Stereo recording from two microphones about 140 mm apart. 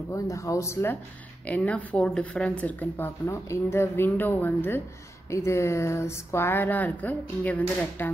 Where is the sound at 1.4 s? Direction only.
10° left (ahead or behind).